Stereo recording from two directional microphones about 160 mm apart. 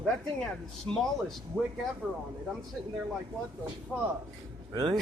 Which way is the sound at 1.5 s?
10° right (ahead or behind).